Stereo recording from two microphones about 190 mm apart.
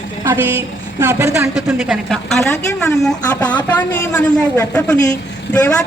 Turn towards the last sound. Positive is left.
turn(degrees=5)  # may be behind; listen again after turning